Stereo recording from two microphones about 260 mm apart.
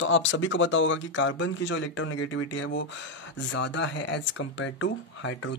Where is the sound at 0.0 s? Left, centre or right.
Left.